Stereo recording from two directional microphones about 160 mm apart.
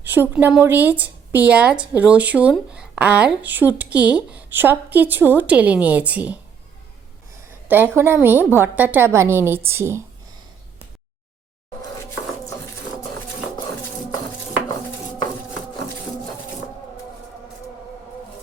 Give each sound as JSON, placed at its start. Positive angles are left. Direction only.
{"t": 0.0, "sound": "a woman's voice", "side_deg": -10}
{"t": 7.7, "sound": "a woman's voice", "side_deg": -15}